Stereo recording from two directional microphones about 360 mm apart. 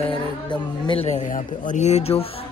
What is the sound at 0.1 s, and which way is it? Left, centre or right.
Speech, centre.